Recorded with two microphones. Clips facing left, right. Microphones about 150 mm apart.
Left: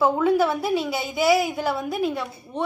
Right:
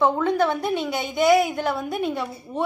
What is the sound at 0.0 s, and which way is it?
A woman's voice, 5° left (ahead or behind).